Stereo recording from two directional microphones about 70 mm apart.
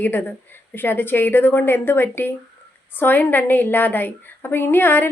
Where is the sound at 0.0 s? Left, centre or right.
Left.